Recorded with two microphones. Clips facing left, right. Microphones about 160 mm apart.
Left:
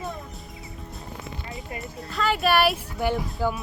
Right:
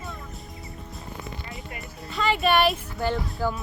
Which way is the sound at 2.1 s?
Centre (ahead or behind).